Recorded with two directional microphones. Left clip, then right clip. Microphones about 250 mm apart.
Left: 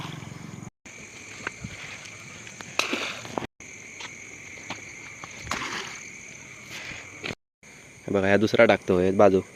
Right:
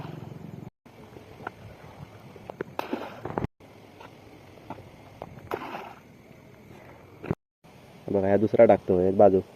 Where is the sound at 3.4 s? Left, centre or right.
Left.